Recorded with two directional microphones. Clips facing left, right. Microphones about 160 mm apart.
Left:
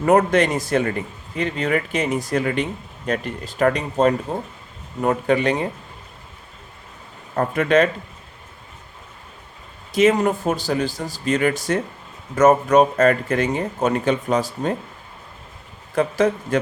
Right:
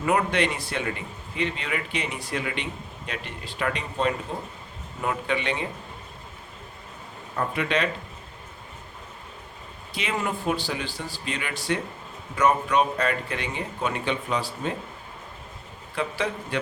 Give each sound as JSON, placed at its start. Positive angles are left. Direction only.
{"t": 0.0, "sound": "a man's voice", "side_deg": 45}
{"t": 7.3, "sound": "a man's voice", "side_deg": 45}
{"t": 9.9, "sound": "a man's voice", "side_deg": 45}
{"t": 16.0, "sound": "a man's voice", "side_deg": 45}